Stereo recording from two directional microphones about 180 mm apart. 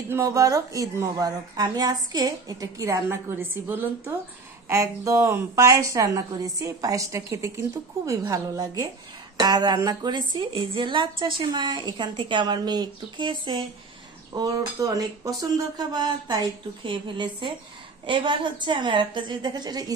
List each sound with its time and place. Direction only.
0.1 s a woman's voice: 15° right (ahead or behind)